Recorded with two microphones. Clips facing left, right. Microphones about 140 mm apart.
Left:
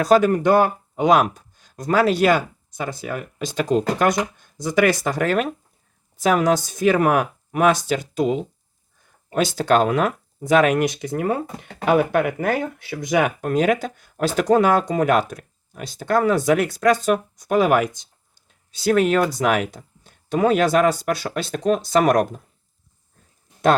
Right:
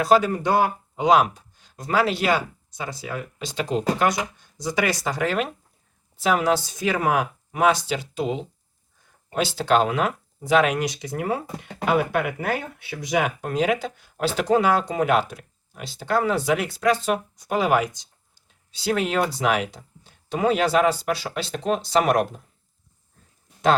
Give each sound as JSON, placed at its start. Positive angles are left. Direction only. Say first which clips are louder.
{"t": 0.0, "sound": "speech", "louder": "left 3 dB", "side_deg": 50}